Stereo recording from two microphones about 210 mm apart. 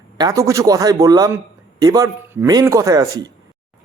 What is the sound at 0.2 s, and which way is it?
A man's voice, 15° right (ahead or behind).